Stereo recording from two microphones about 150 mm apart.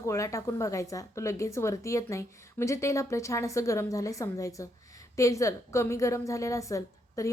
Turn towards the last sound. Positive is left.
turn(degrees=20)  # may be behind; listen again after turning